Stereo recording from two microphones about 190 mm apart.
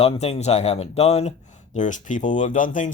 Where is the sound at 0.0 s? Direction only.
30° left (ahead or behind).